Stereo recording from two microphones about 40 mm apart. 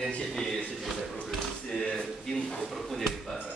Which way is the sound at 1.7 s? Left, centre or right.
Left.